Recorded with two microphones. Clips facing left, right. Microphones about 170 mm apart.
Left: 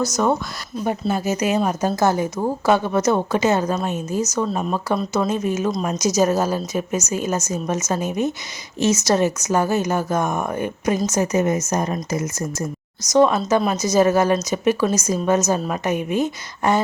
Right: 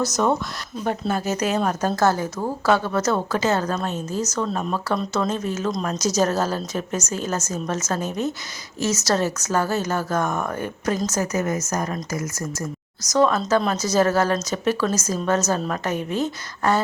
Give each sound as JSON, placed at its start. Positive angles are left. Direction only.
{"t": 0.0, "sound": "speech", "side_deg": 0}